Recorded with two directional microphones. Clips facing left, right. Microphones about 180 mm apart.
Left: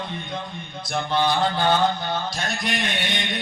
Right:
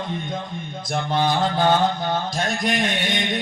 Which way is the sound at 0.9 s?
45° right (ahead or behind).